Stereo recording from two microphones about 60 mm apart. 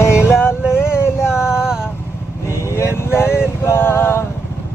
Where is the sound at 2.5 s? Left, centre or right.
Left.